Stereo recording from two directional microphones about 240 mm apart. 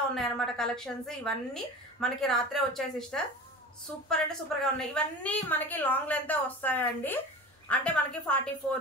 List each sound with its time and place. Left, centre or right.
0.1 s a woman's voice: centre